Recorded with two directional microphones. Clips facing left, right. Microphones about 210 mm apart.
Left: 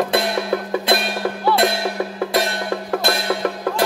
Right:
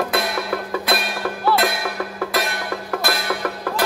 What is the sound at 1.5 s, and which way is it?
Music, 25° left (ahead or behind).